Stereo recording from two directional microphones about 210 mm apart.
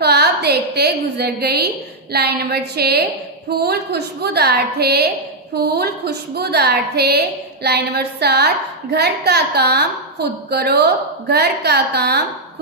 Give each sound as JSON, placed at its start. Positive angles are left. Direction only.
{"t": 0.0, "sound": "a woman's voice", "side_deg": -50}